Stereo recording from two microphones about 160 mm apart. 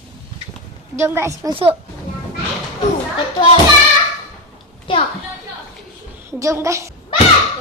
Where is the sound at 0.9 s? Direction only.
15° right (ahead or behind).